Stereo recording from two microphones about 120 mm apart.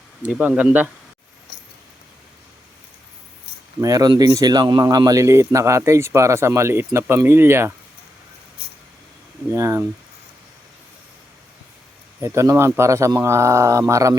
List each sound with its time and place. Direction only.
0.3 s speech: 10° right (ahead or behind)
3.8 s speech: 30° right (ahead or behind)
9.5 s speech: 25° right (ahead or behind)
12.2 s speech: 25° right (ahead or behind)